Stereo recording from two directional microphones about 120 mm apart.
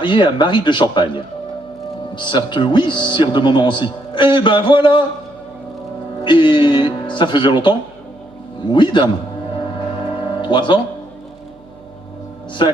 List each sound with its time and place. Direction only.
0.0 s speech: 40° left (ahead or behind)
6.2 s speech: 40° left (ahead or behind)
10.1 s music: 40° left (ahead or behind)
12.6 s speech: 40° left (ahead or behind)